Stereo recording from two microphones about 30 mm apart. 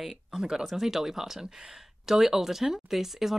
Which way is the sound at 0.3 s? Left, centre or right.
Right.